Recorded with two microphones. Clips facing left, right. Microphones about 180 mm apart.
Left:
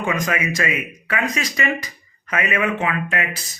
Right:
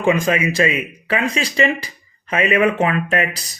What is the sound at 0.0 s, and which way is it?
Speech, 30° right (ahead or behind).